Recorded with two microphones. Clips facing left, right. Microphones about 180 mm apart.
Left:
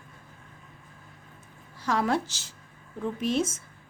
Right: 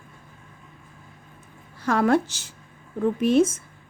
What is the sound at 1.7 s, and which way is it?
A woman's voice, 55° right (ahead or behind).